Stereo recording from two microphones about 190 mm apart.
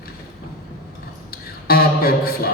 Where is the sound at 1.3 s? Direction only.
55° left (ahead or behind).